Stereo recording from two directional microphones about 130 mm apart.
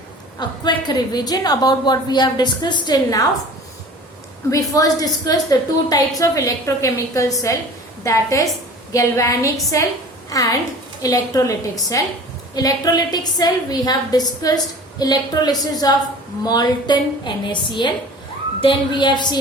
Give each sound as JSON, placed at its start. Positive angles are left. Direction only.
{"t": 0.3, "sound": "a woman's voice", "side_deg": 35}
{"t": 4.4, "sound": "a woman's voice", "side_deg": 25}